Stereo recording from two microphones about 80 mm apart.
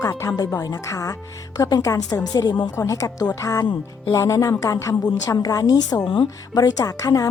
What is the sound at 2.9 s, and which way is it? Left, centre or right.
A woman's voice, left.